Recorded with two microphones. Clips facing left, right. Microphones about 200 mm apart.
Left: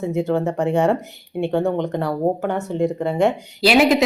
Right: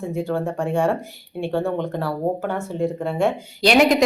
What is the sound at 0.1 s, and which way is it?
Speech, 20° left (ahead or behind).